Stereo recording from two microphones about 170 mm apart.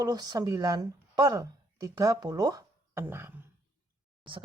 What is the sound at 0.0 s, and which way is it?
Speech, 25° right (ahead or behind).